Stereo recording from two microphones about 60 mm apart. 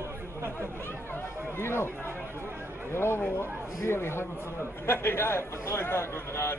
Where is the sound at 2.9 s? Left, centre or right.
Left.